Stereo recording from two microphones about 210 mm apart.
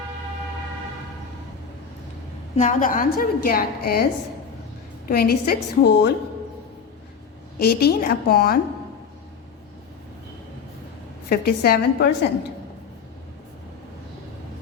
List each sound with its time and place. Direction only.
2.6 s a woman's voice: 40° left (ahead or behind)
5.0 s a woman's voice: 45° left (ahead or behind)
7.6 s a woman's voice: 50° left (ahead or behind)
11.3 s a woman's voice: 50° left (ahead or behind)